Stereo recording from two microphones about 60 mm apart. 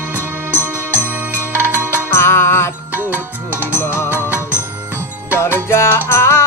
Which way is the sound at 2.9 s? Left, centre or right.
Right.